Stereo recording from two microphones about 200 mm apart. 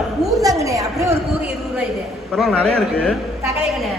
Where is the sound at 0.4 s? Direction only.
15° right (ahead or behind).